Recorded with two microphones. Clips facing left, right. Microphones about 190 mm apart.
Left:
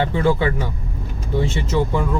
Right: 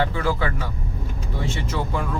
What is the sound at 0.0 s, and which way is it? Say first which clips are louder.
Speech: left 5 dB; 25° left (ahead or behind).